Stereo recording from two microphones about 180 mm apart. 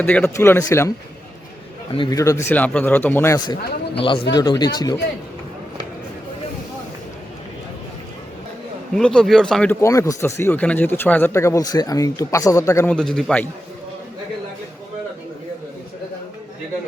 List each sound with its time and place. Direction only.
0.0 s speech: 10° left (ahead or behind)
2.0 s speech: 20° left (ahead or behind)
9.0 s speech: 5° left (ahead or behind)
9.8 s speech: 15° left (ahead or behind)
12.9 s speech: 5° left (ahead or behind)